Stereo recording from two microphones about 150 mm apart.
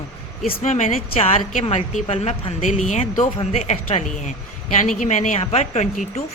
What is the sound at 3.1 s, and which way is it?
A woman's voice, 40° left (ahead or behind).